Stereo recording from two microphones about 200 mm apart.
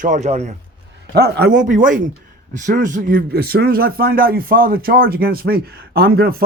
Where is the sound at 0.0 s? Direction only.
35° right (ahead or behind).